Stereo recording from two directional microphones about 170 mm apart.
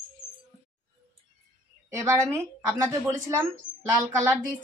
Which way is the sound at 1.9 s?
15° right (ahead or behind).